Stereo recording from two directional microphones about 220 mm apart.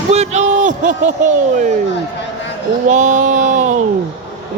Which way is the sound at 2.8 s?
35° right (ahead or behind).